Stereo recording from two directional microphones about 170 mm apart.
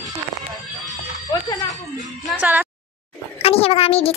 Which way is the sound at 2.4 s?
10° right (ahead or behind).